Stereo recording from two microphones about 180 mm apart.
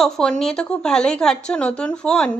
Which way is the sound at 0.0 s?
5° left (ahead or behind).